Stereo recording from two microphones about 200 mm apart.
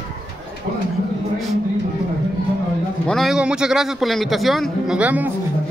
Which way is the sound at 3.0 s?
Centre (ahead or behind).